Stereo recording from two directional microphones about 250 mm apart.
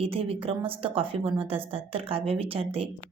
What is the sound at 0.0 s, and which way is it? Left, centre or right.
Speech, right.